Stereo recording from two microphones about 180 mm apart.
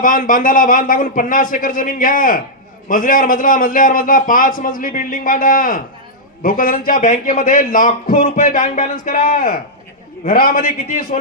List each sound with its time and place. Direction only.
0.0 s a man's voice: 50° left (ahead or behind)
11.1 s speech: 35° left (ahead or behind)